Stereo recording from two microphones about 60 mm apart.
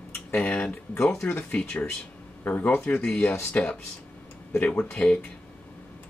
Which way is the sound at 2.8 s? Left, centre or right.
Centre.